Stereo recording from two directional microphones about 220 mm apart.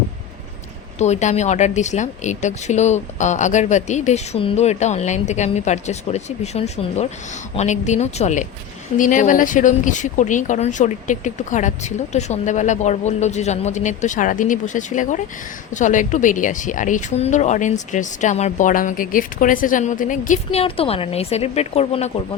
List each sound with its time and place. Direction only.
0.9 s speech: 30° left (ahead or behind)